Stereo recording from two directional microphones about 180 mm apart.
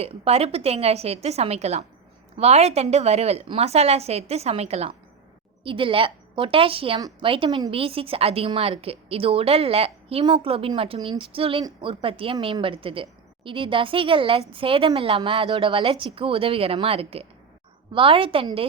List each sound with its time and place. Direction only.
0.0 s a woman's voice: 35° right (ahead or behind)